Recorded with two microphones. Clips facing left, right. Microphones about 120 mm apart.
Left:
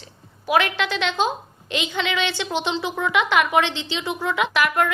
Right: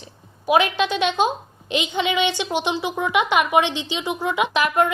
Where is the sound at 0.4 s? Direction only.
20° right (ahead or behind).